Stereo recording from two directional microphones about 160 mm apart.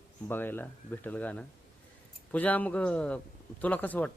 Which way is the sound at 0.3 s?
15° left (ahead or behind).